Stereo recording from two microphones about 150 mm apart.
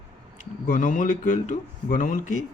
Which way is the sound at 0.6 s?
65° left (ahead or behind).